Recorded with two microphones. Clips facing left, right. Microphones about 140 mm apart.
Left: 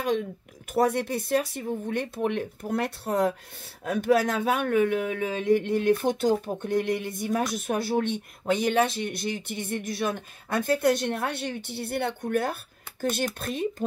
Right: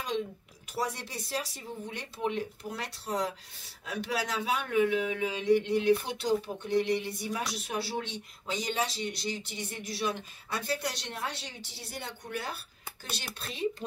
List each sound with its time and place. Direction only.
0.7 s speech: 55° left (ahead or behind)